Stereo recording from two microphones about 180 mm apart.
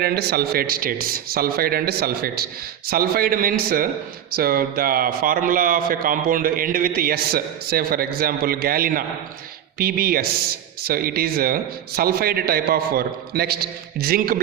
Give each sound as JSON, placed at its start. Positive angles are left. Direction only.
{"t": 0.0, "sound": "a man's voice", "side_deg": -60}